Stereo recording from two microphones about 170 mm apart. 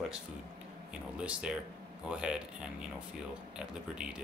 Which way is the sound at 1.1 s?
5° right (ahead or behind).